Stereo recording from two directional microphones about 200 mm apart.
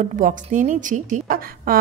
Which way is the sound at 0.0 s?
40° right (ahead or behind).